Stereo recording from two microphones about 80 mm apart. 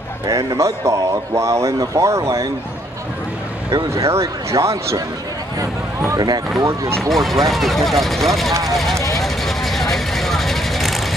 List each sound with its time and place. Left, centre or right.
0.3 s a man's voice: right
3.9 s a man's voice: right
7.0 s speech: centre
9.1 s vehicle: centre